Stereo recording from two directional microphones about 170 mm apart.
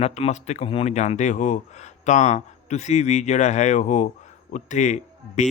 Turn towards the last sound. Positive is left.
turn(degrees=45)  # may be behind; listen again after turning